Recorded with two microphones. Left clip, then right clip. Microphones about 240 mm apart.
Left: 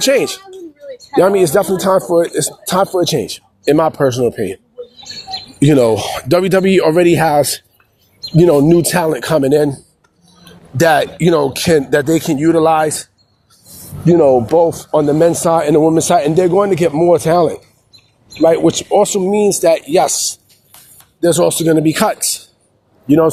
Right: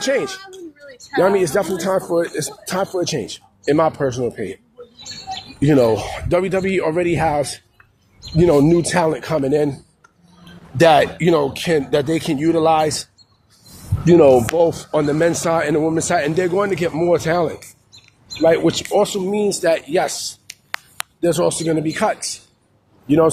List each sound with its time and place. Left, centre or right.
0.0 s speech: left
5.5 s speech: left; by 13.1 s centre
14.1 s speech: centre